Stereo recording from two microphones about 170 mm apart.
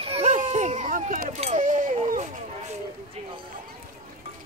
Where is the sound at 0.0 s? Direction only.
35° right (ahead or behind).